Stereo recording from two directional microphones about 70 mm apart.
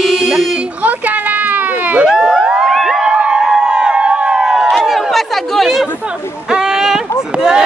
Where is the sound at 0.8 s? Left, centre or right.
Right.